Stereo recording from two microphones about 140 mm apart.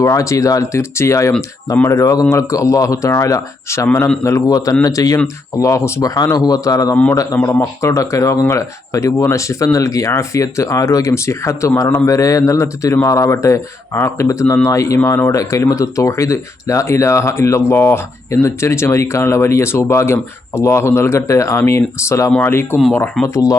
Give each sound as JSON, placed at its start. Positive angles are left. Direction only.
{"t": 0.0, "sound": "speech", "side_deg": 20}
{"t": 6.9, "sound": "speech", "side_deg": 10}